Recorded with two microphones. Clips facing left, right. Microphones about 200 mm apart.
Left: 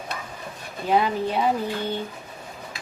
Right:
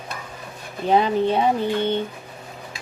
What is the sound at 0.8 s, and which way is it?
Speech, 25° right (ahead or behind).